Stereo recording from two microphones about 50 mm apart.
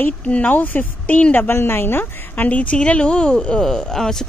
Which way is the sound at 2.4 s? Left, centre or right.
Left.